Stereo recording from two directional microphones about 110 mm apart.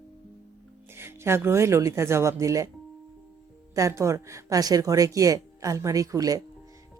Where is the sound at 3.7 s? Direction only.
30° right (ahead or behind).